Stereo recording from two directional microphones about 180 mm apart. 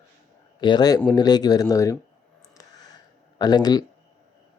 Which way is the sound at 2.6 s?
20° left (ahead or behind).